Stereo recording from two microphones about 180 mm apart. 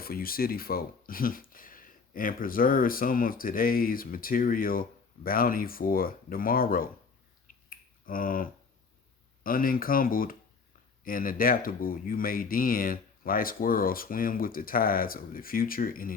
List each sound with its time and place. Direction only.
0.0 s speech: 55° left (ahead or behind)
7.4 s finger snapping: 50° left (ahead or behind)
9.4 s speech: 50° left (ahead or behind)